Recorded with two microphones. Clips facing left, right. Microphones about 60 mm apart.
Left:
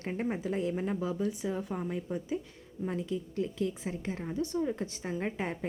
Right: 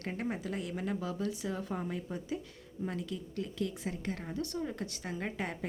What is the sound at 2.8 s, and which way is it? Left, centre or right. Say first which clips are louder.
A woman's voice: left 5 dB; left.